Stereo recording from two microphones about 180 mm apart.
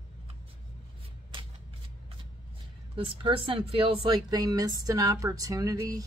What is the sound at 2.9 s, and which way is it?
Speech, 30° right (ahead or behind).